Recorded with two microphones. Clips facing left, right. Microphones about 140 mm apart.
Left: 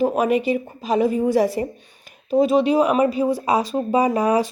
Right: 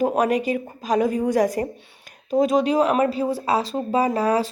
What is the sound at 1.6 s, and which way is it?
Speech, 55° right (ahead or behind).